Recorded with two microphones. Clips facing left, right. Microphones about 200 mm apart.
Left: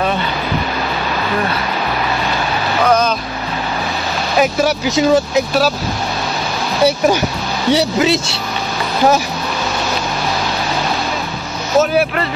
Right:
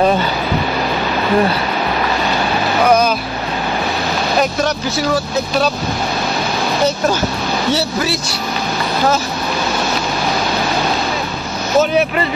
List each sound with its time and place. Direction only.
4.4 s speech: 5° left (ahead or behind)
4.8 s speech: 20° left (ahead or behind)
7.7 s speech: 20° left (ahead or behind)
11.8 s speech: 5° left (ahead or behind)